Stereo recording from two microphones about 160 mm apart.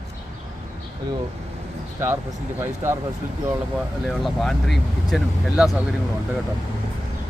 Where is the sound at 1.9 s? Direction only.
15° right (ahead or behind).